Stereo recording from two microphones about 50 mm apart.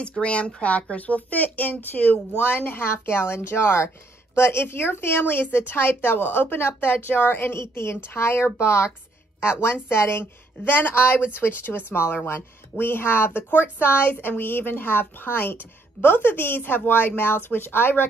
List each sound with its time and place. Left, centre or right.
0.2 s speech: left